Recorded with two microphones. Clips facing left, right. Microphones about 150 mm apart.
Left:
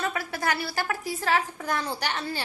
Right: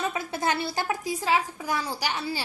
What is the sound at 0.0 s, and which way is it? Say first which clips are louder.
A woman's voice: right 1 dB; 20° right (ahead or behind).